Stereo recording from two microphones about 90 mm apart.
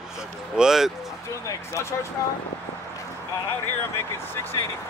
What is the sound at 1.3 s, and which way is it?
Speech, 35° left (ahead or behind).